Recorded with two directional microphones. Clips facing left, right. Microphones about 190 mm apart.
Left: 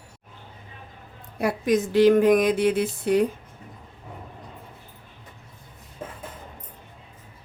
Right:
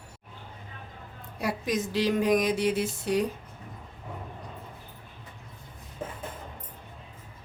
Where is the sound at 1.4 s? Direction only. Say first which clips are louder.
Left 7 dB; 55° left (ahead or behind).